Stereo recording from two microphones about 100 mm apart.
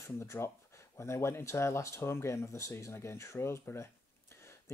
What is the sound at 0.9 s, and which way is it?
Speech, 25° left (ahead or behind).